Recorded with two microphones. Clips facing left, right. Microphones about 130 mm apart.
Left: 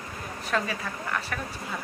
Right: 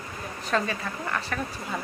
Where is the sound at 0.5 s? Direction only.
5° left (ahead or behind).